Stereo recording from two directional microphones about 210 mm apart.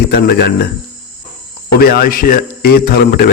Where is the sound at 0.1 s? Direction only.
50° left (ahead or behind).